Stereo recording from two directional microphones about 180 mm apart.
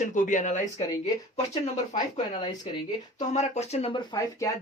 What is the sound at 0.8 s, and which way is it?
Speech, 20° left (ahead or behind).